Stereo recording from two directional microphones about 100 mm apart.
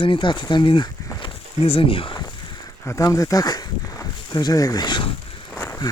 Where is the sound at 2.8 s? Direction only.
35° left (ahead or behind); by 5.2 s 55° left (ahead or behind).